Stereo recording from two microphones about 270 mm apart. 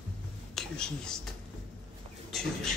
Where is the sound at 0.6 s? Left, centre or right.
Centre.